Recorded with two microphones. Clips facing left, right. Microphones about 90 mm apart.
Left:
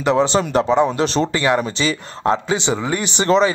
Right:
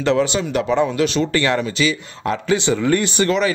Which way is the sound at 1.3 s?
15° left (ahead or behind).